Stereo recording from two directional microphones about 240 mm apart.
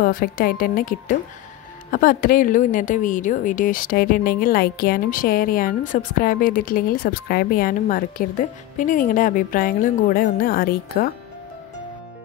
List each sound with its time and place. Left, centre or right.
0.0 s a woman's voice: left